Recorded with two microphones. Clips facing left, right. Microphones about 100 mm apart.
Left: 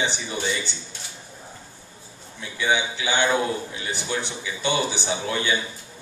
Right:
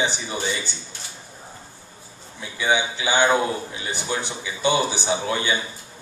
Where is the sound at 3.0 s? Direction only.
35° right (ahead or behind).